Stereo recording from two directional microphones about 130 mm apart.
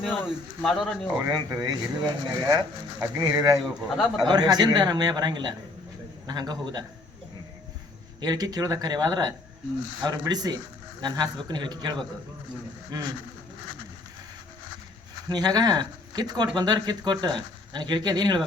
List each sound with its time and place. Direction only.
0.6 s speech: centre (ahead or behind)
1.2 s speech: 30° right (ahead or behind)
3.8 s speech: centre (ahead or behind)
4.2 s speech: 30° right (ahead or behind)
8.2 s speech: 30° right (ahead or behind)
15.3 s speech: 30° right (ahead or behind)